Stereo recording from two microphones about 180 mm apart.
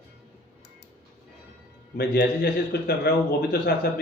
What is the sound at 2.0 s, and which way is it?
A man's voice, 65° left (ahead or behind).